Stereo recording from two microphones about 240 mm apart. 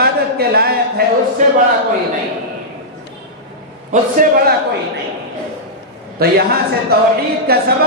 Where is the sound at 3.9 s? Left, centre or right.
Right.